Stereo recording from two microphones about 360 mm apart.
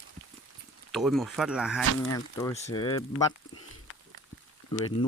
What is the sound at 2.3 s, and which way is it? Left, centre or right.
Speech, centre.